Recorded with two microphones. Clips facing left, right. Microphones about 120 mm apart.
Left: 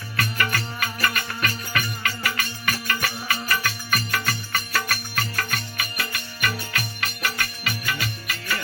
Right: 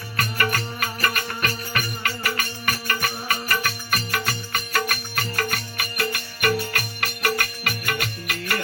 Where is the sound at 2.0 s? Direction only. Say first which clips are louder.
Right 1 dB; 40° right (ahead or behind).